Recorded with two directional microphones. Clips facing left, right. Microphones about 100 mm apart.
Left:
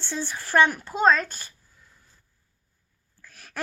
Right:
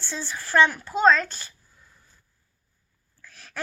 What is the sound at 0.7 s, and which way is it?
Child singing, 20° left (ahead or behind).